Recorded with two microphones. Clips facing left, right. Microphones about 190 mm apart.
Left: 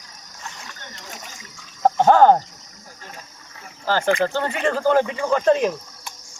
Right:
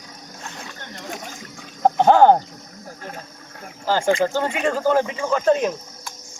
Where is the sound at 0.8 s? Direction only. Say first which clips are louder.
Right 6 dB; 55° right (ahead or behind).